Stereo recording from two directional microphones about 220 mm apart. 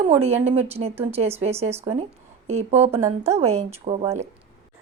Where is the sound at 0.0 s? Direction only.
30° right (ahead or behind).